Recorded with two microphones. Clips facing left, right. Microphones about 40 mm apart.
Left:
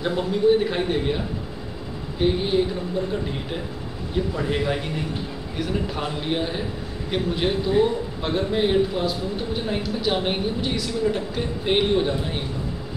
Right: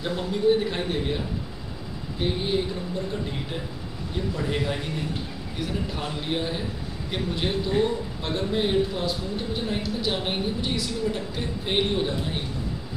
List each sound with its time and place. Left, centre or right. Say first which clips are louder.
0.0 s a man's voice: left 3 dB; centre
4.1 s a man's voice: left 4 dB; centre